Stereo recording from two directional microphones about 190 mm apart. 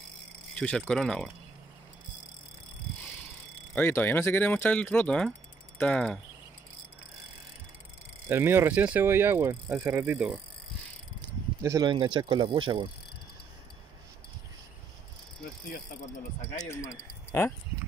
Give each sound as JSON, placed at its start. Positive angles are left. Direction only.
{"t": 0.6, "sound": "speech", "side_deg": 5}
{"t": 3.7, "sound": "speech", "side_deg": 10}
{"t": 8.3, "sound": "speech", "side_deg": -10}
{"t": 11.1, "sound": "speech", "side_deg": -20}
{"t": 16.6, "sound": "speech", "side_deg": 15}